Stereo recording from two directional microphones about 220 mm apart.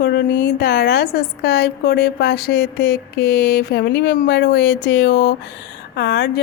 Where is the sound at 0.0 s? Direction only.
45° left (ahead or behind).